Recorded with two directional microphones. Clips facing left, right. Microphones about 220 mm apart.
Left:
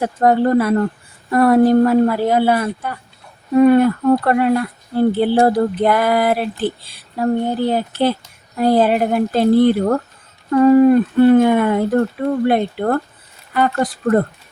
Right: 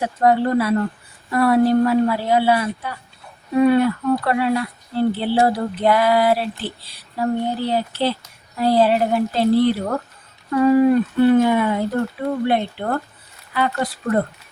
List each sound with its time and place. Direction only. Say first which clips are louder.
0.0 s speech: left 3 dB; 50° left (ahead or behind)